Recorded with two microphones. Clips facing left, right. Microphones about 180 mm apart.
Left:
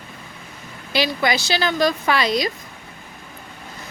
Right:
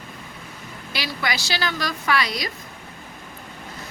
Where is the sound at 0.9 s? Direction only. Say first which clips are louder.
Left 8 dB; 25° left (ahead or behind).